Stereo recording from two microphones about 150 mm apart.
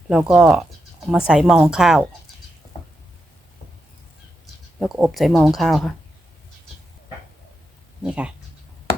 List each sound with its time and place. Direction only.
0.1 s speech: 5° right (ahead or behind)
4.8 s speech: 5° right (ahead or behind)
8.0 s speech: 5° right (ahead or behind)